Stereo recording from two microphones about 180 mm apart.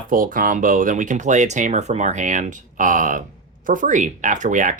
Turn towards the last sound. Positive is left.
turn(degrees=-45)  # may be behind; listen again after turning